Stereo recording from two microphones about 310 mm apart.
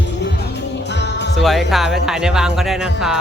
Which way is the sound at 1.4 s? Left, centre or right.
Centre.